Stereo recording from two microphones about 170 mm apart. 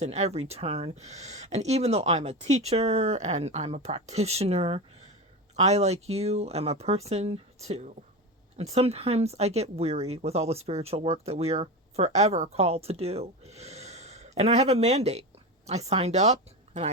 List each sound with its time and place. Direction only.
0.0 s a woman's voice: 40° right (ahead or behind)